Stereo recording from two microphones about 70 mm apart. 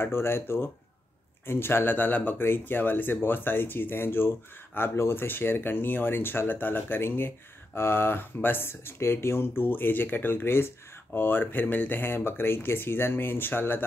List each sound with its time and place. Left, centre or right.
0.0 s speech: left